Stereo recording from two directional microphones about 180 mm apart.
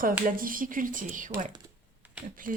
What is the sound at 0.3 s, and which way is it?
Speech, 50° right (ahead or behind).